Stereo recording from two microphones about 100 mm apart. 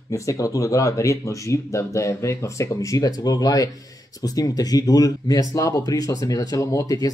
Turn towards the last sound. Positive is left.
turn(degrees=35)  # may be behind; listen again after turning